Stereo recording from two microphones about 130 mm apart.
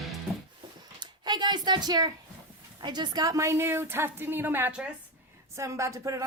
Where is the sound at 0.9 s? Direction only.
35° right (ahead or behind).